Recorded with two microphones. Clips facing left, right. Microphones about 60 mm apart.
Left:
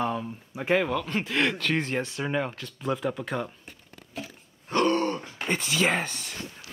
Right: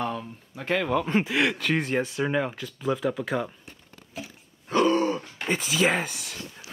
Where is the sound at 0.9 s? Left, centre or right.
Centre.